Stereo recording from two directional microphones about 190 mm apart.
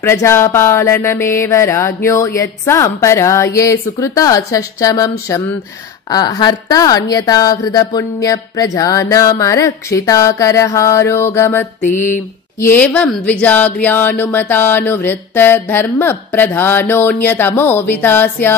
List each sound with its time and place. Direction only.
0.0 s speech: 15° left (ahead or behind)
11.8 s mantra: 40° left (ahead or behind)
12.6 s speech: 10° left (ahead or behind)